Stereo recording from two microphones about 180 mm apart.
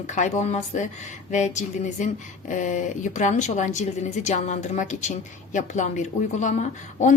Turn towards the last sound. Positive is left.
turn(degrees=40)  # may be behind; listen again after turning